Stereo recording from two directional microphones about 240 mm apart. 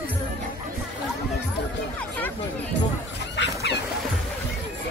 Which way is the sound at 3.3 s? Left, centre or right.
Left.